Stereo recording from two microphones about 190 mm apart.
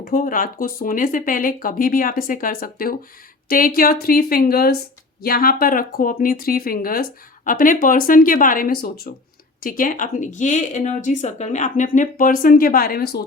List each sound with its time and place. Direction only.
0.0 s speech: 50° left (ahead or behind)